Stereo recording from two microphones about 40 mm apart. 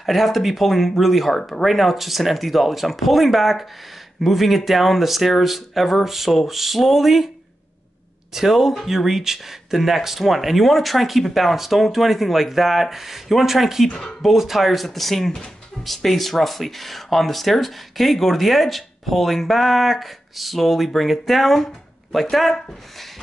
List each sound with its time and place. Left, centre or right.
0.0 s speech: centre
8.3 s speech: centre